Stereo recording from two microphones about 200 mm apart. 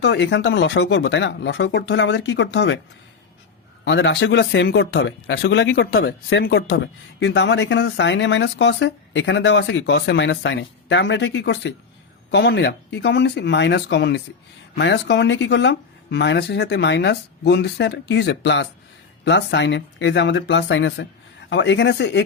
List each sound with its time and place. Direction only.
0.0 s speech: 60° left (ahead or behind)
3.8 s speech: 65° left (ahead or behind)
6.7 s speech: 65° left (ahead or behind)